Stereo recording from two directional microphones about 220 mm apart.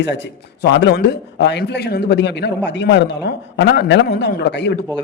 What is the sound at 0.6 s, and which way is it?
A man's voice, 50° left (ahead or behind).